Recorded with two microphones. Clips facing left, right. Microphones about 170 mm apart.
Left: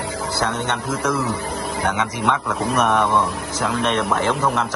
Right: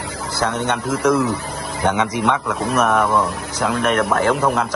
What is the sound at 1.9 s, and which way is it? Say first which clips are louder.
Speech: right 4 dB; 15° right (ahead or behind).